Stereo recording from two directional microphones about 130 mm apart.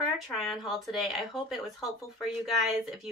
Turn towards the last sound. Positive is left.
turn(degrees=0)  # may be behind; listen again after turning